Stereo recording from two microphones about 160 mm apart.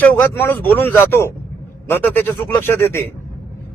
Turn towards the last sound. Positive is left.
turn(degrees=15)  # may be behind; listen again after turning